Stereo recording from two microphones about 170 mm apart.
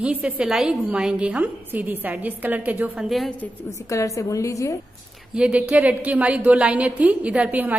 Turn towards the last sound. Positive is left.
turn(degrees=-10)  # may be behind; listen again after turning